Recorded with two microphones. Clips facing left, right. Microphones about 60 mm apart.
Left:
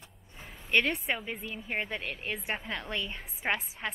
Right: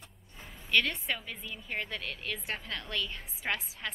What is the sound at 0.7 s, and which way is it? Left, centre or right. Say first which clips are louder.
A woman's voice: left 2 dB; left.